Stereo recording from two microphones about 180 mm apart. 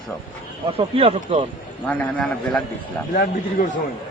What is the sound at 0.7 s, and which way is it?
Speech, 30° right (ahead or behind).